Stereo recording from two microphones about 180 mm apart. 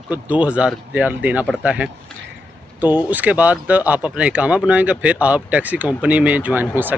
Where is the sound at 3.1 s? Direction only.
10° right (ahead or behind).